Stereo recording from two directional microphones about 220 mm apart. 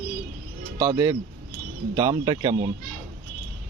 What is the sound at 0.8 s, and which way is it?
Speech, 15° right (ahead or behind).